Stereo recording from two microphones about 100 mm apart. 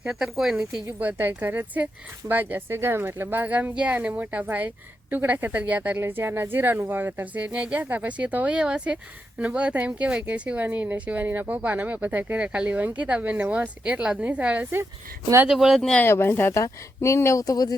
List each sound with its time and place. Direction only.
0.1 s speech: 5° right (ahead or behind)
0.9 s speech: 20° right (ahead or behind)
15.4 s speech: 5° right (ahead or behind)
16.0 s speech: 25° left (ahead or behind); by 17.7 s 40° left (ahead or behind)